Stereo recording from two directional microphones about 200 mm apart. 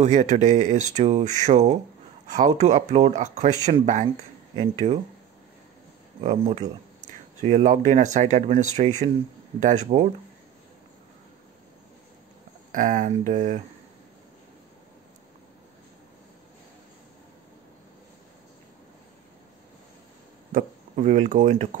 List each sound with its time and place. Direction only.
0.0 s speech: 35° right (ahead or behind)
6.2 s speech: 30° right (ahead or behind)
12.7 s speech: 40° right (ahead or behind)
20.5 s speech: 40° right (ahead or behind)